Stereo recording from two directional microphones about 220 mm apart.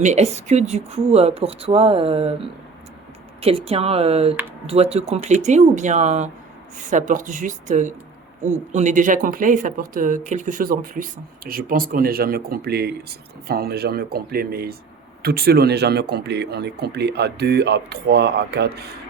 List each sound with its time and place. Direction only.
0.0 s speech: 30° right (ahead or behind); by 18.9 s 50° right (ahead or behind)